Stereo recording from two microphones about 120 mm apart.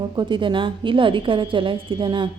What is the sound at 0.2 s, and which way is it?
A woman's voice, 45° right (ahead or behind).